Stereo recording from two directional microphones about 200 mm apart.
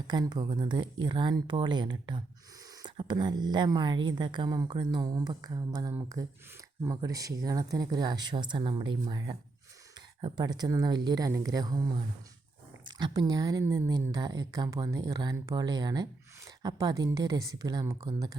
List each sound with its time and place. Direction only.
0.1 s a woman's voice: 20° right (ahead or behind)